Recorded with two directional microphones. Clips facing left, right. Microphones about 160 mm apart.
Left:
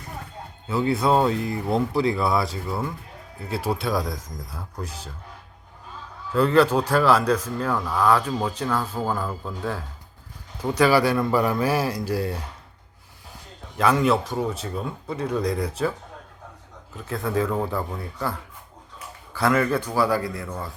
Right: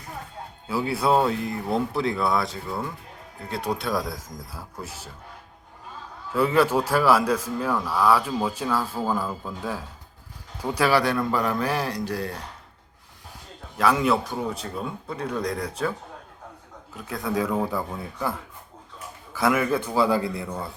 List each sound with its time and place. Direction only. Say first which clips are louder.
0.7 s speech: left 2 dB; 5° right (ahead or behind)
6.3 s speech: left 2 dB; 10° right (ahead or behind)
13.7 s speech: left 1 dB; centre (ahead or behind)
17.1 s speech: left 1 dB; centre (ahead or behind)
19.4 s speech: left 1 dB; 10° right (ahead or behind)